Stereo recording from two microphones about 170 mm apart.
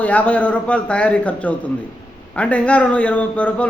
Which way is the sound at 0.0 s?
10° left (ahead or behind).